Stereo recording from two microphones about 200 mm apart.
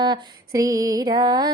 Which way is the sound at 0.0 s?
20° right (ahead or behind).